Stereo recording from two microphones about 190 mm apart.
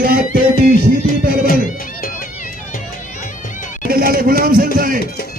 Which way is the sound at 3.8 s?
50° right (ahead or behind).